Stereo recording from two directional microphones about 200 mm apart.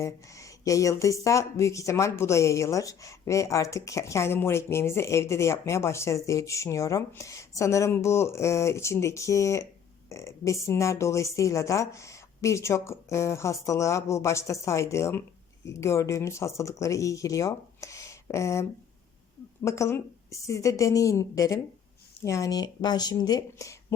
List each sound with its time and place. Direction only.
0.0 s speech: 15° left (ahead or behind)
19.6 s speech: 15° left (ahead or behind)